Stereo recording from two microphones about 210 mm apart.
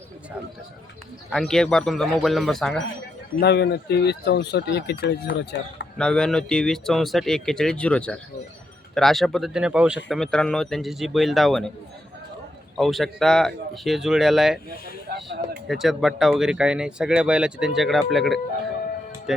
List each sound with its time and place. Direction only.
1.3 s speech: centre (ahead or behind)
3.4 s speech: 55° left (ahead or behind)
6.0 s speech: 5° left (ahead or behind)
12.7 s speech: centre (ahead or behind)
15.1 s a sound: 50° right (ahead or behind)
15.6 s speech: centre (ahead or behind)